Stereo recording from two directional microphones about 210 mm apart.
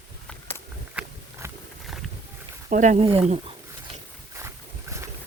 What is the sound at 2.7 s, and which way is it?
Speech, 35° right (ahead or behind).